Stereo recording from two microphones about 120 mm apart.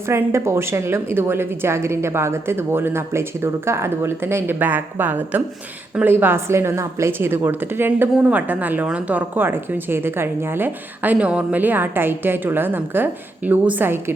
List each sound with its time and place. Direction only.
0.1 s a woman's voice: 20° right (ahead or behind)